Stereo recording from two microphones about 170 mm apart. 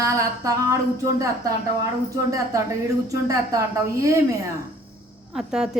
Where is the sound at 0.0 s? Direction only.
20° right (ahead or behind).